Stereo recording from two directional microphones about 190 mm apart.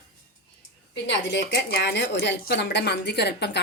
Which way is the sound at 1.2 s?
60° left (ahead or behind).